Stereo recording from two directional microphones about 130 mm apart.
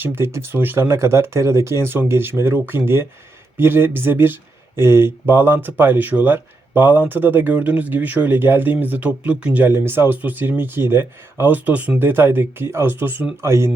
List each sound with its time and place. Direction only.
0.0 s speech: 20° right (ahead or behind)